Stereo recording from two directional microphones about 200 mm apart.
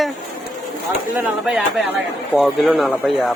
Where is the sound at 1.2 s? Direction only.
5° right (ahead or behind).